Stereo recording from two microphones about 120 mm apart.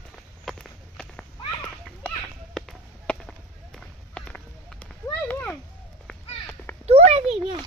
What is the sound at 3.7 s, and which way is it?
Run, 10° left (ahead or behind).